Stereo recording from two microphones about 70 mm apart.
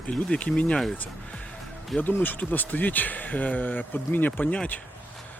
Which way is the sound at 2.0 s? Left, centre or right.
Left.